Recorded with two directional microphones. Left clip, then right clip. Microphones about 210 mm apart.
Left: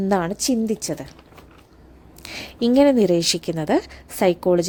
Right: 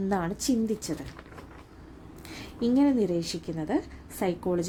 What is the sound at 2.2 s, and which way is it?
Speech, 35° left (ahead or behind).